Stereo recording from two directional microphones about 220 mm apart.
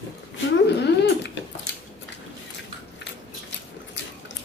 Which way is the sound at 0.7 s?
50° left (ahead or behind).